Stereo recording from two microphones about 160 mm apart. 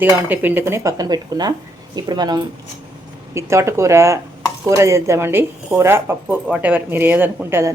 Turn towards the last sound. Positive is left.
turn(degrees=-15)  # may be behind; listen again after turning